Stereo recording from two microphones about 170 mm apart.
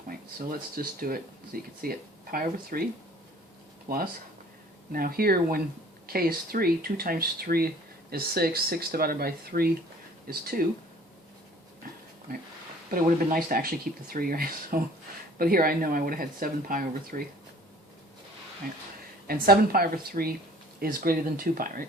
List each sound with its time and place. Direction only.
0.8 s speech: 60° right (ahead or behind)
3.9 s speech: 60° right (ahead or behind)
12.3 s speech: 60° right (ahead or behind)
19.3 s speech: 60° right (ahead or behind)